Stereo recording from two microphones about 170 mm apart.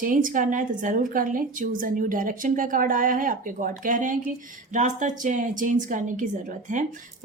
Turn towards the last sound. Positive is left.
turn(degrees=-50)  # may be behind; listen again after turning